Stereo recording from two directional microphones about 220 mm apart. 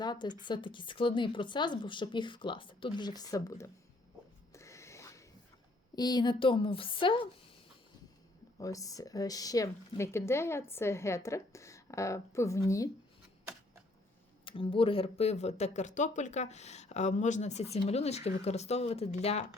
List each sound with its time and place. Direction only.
0.0 s speech: 20° left (ahead or behind)
4.5 s a sound: 15° left (ahead or behind)
6.0 s speech: 20° left (ahead or behind)
8.5 s speech: 15° left (ahead or behind)
14.4 s speech: 25° left (ahead or behind)